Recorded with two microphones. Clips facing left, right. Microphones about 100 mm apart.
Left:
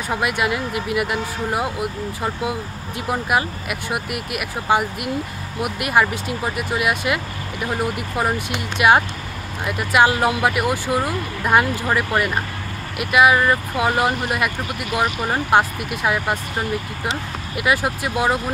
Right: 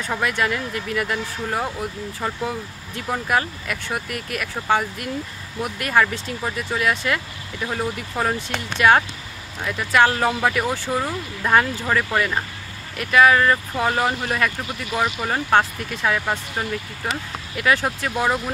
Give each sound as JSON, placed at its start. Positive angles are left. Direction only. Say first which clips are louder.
{"t": 0.1, "sound": "speech", "louder": "left 2 dB", "side_deg": 10}
{"t": 12.9, "sound": "speech", "louder": "even", "side_deg": 10}
{"t": 17.6, "sound": "speech", "louder": "even", "side_deg": 10}